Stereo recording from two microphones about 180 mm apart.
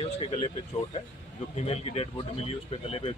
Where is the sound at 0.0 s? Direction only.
30° left (ahead or behind).